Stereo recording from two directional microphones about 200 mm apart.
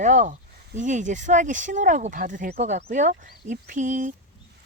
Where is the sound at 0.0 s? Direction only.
40° right (ahead or behind).